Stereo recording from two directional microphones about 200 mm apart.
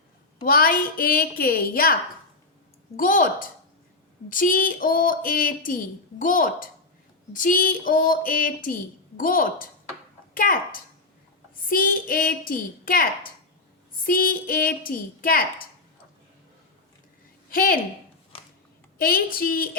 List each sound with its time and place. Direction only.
0.4 s a woman's voice: 45° left (ahead or behind)
17.5 s a woman's voice: 45° left (ahead or behind)
18.9 s a woman's voice: 50° left (ahead or behind)